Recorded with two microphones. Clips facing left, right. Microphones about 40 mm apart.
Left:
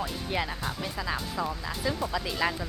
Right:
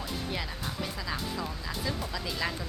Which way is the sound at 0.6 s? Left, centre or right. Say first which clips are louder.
Left 3 dB; centre.